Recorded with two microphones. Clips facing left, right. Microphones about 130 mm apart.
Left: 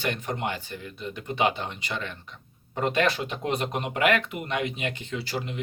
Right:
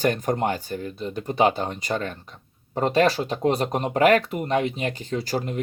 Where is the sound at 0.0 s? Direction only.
45° right (ahead or behind).